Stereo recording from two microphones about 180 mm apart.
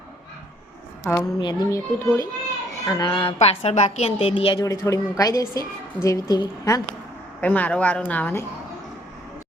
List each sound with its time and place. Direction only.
1.1 s speech: 10° left (ahead or behind)
1.4 s a woman's voice: 25° left (ahead or behind)
7.4 s speech: 10° left (ahead or behind)